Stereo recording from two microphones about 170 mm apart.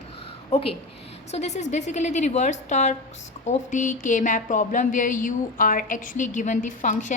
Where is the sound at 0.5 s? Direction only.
35° left (ahead or behind).